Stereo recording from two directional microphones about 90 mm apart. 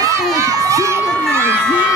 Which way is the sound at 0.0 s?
35° right (ahead or behind).